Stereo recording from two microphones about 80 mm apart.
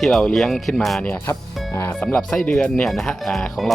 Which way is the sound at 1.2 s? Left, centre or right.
Left.